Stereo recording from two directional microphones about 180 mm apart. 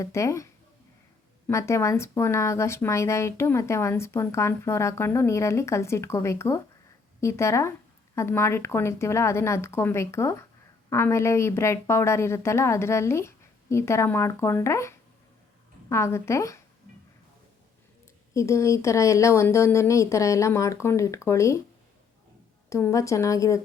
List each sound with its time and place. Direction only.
0.0 s speech: 15° left (ahead or behind)
1.5 s speech: 15° left (ahead or behind)
18.3 s speech: 15° left (ahead or behind)
22.7 s speech: 15° left (ahead or behind)